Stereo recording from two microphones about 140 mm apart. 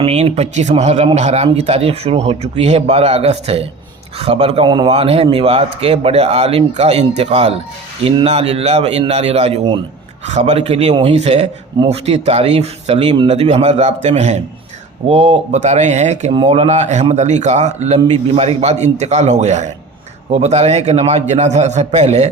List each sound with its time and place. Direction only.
0.0 s speech: 45° right (ahead or behind)
4.9 s speech: 45° right (ahead or behind)
10.2 s a man's voice: 55° right (ahead or behind)